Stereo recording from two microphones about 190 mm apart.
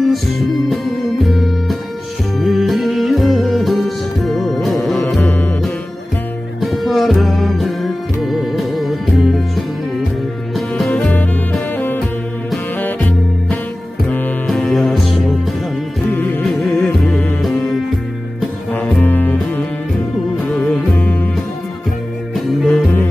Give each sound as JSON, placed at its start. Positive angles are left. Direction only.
{"t": 0.0, "sound": "music", "side_deg": 0}
{"t": 14.0, "sound": "music", "side_deg": 5}
{"t": 22.3, "sound": "music", "side_deg": 0}